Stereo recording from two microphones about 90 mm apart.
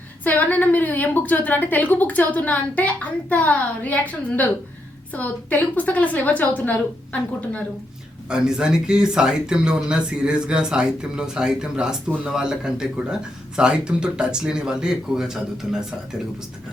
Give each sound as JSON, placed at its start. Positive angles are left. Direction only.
{"t": 0.3, "sound": "a woman's voice", "side_deg": 20}
{"t": 8.3, "sound": "speech", "side_deg": -5}